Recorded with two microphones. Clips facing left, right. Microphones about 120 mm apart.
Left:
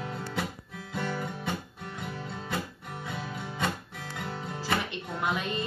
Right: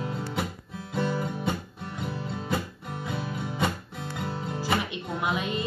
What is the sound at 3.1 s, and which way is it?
Music, 15° right (ahead or behind).